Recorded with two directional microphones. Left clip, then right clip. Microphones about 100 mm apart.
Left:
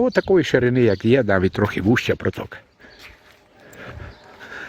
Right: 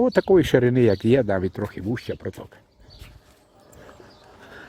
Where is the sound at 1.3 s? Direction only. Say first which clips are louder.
Left 6 dB; 15° left (ahead or behind).